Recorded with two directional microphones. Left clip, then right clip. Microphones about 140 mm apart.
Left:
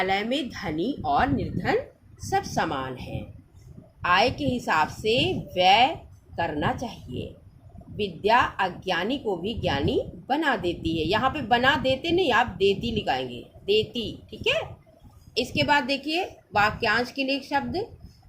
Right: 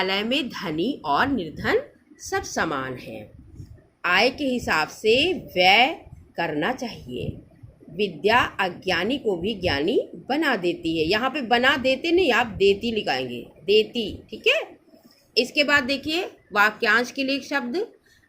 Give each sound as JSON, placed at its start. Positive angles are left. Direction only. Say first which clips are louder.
{"t": 0.0, "sound": "a woman's voice", "louder": "right 2 dB", "side_deg": -15}